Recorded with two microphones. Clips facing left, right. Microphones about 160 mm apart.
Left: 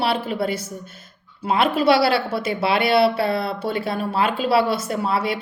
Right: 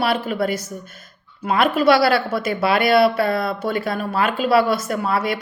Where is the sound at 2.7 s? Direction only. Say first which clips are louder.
Right 2 dB; 50° right (ahead or behind).